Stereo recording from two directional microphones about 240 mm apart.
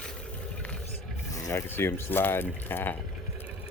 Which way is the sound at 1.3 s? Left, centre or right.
Centre.